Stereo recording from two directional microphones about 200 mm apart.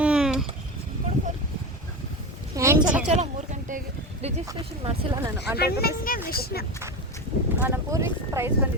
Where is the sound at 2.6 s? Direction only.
15° right (ahead or behind).